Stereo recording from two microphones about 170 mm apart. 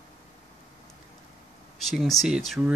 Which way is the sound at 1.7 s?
Centre (ahead or behind).